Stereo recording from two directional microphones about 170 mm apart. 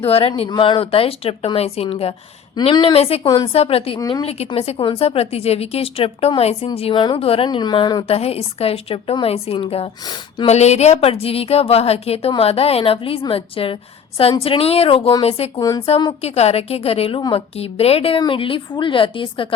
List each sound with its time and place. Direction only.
0.0 s a woman's voice: 35° left (ahead or behind)
3.2 s a woman's voice: 25° left (ahead or behind)
3.5 s a woman's voice: 35° left (ahead or behind)